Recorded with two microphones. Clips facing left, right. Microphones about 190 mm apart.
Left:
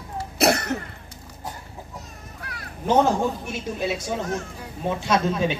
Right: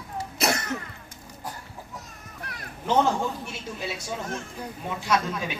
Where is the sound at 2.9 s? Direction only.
20° left (ahead or behind).